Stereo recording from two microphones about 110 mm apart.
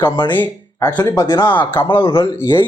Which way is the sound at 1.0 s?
30° left (ahead or behind).